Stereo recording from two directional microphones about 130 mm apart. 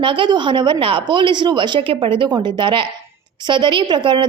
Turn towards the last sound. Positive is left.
turn(degrees=-35)  # may be behind; listen again after turning